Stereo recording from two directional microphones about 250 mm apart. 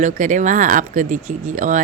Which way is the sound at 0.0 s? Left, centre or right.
Right.